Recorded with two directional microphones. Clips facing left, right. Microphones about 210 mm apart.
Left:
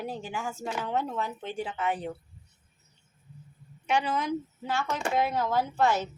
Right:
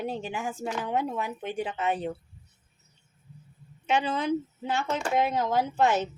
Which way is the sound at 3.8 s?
25° right (ahead or behind).